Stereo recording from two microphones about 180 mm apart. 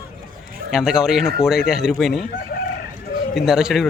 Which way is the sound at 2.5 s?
60° left (ahead or behind).